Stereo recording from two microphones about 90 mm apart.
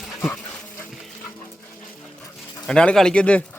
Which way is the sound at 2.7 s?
5° left (ahead or behind).